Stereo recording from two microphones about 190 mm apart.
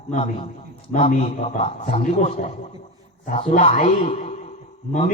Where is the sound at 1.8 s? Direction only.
40° left (ahead or behind).